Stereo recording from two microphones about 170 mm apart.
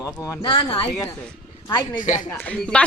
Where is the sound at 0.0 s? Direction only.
20° left (ahead or behind).